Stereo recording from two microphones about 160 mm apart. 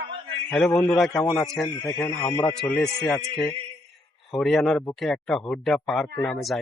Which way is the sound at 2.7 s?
10° left (ahead or behind).